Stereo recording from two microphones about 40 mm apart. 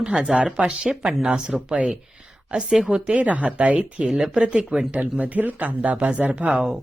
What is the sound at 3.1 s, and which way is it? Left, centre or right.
Speech, right.